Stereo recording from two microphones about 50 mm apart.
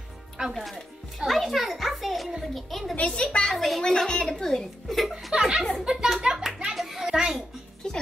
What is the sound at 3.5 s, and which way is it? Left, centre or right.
Speech, centre.